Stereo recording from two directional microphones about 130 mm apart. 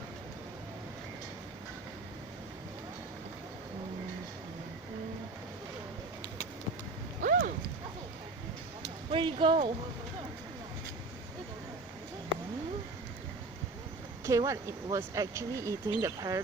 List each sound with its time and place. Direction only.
7.2 s clip-clop: 90° right
9.1 s speech: 40° right (ahead or behind)
14.3 s speech: 25° right (ahead or behind)